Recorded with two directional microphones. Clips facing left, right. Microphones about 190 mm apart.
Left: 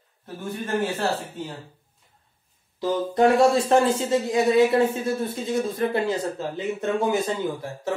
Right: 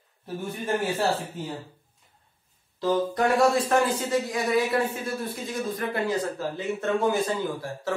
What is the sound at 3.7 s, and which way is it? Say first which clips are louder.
Speech: left 4 dB; 25° left (ahead or behind).